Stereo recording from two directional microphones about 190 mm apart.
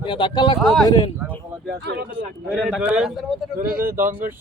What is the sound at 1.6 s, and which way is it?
Speech, 60° right (ahead or behind).